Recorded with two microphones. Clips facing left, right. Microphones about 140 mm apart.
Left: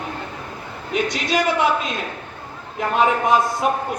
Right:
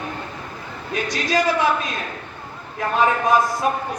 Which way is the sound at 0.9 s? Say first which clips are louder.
Left 1 dB; 20° left (ahead or behind).